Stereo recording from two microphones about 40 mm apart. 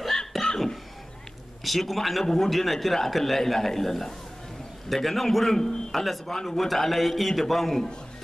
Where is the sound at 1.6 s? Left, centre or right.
Centre.